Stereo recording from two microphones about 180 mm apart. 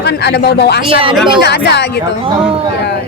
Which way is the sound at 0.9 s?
30° right (ahead or behind).